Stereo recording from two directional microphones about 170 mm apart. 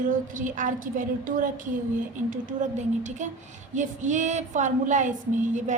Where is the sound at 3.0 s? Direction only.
45° right (ahead or behind).